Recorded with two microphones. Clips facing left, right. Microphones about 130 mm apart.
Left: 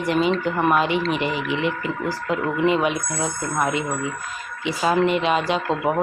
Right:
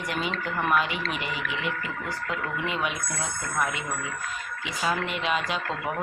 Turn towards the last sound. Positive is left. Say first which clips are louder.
# left 7 dB
turn(degrees=30)  # may be behind; listen again after turning